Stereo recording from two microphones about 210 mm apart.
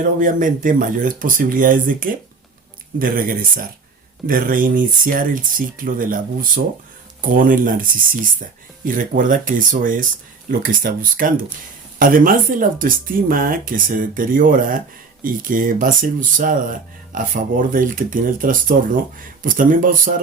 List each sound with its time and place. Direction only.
0.2 s speech: 40° right (ahead or behind)